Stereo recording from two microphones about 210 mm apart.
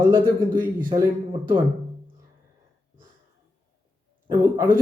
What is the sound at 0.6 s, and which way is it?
Speech, 15° right (ahead or behind).